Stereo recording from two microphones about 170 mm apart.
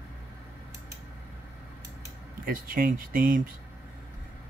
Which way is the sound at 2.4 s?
55° right (ahead or behind).